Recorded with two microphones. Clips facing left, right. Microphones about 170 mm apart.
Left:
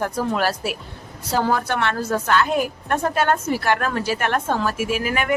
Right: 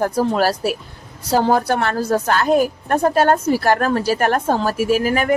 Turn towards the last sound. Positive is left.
turn(degrees=-40)  # may be behind; listen again after turning